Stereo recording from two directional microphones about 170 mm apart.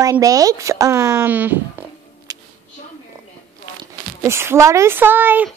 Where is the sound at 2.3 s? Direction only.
20° right (ahead or behind).